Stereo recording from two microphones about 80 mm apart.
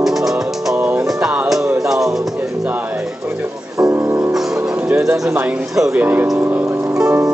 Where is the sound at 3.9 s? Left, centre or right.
Right.